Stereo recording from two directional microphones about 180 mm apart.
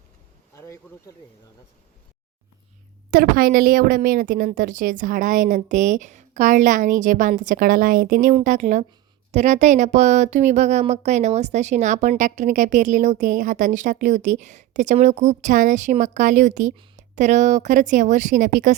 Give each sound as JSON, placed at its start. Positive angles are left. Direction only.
{"t": 0.5, "sound": "speech", "side_deg": 15}
{"t": 3.1, "sound": "a woman's voice", "side_deg": -55}